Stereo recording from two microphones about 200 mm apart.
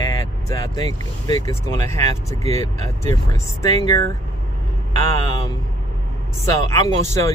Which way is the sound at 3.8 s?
20° left (ahead or behind).